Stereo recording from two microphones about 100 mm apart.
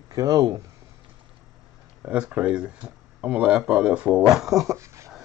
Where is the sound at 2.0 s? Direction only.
10° right (ahead or behind).